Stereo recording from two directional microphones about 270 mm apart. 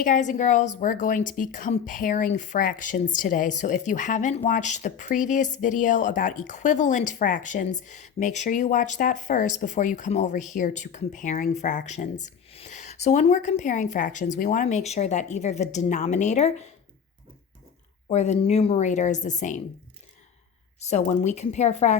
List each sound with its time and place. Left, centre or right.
0.0 s speech: left
18.1 s speech: left
20.8 s speech: left